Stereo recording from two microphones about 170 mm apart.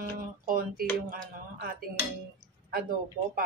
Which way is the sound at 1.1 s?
55° right (ahead or behind).